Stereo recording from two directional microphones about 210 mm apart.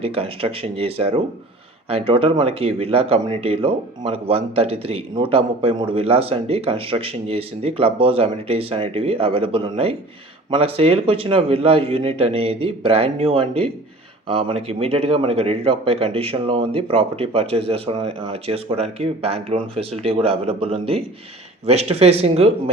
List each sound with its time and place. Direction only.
0.0 s speech: 25° right (ahead or behind)